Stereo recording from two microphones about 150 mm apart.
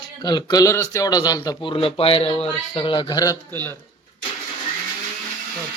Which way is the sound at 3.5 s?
15° left (ahead or behind).